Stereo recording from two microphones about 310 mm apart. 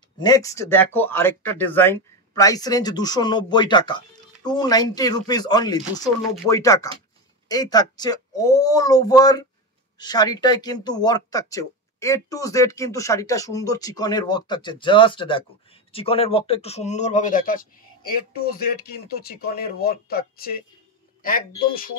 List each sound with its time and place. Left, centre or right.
0.2 s speech: centre; by 21.9 s left